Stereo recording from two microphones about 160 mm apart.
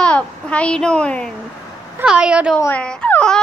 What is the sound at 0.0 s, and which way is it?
A child's voice, 5° left (ahead or behind).